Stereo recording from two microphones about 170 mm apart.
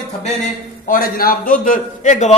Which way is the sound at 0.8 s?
55° left (ahead or behind).